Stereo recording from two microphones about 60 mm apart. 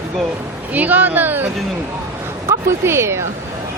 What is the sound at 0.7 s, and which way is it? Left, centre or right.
Speech, right.